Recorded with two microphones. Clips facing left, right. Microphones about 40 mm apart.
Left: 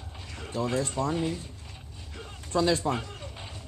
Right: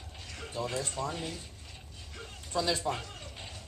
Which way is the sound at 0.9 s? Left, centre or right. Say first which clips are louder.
Left 7 dB; centre.